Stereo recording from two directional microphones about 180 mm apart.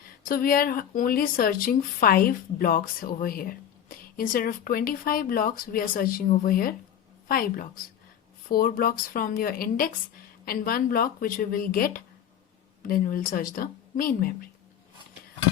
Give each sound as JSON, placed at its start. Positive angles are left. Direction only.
{"t": 0.3, "sound": "a woman's voice", "side_deg": 55}